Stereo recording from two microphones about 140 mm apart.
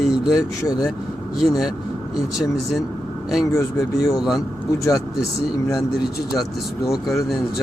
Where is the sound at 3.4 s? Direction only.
20° left (ahead or behind).